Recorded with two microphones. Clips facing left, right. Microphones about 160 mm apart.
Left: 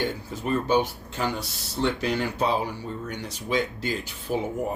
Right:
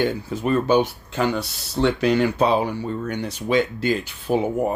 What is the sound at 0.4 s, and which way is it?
Speech, 70° right (ahead or behind).